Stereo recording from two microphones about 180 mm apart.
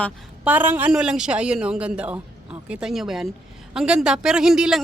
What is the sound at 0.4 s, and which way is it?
Speech, 10° right (ahead or behind).